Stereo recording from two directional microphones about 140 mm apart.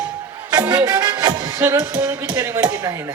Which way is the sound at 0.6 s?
10° right (ahead or behind).